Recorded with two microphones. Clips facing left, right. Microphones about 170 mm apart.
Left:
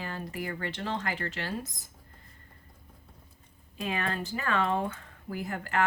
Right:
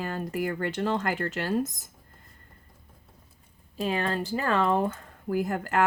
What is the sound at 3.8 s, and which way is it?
Speech, 35° right (ahead or behind).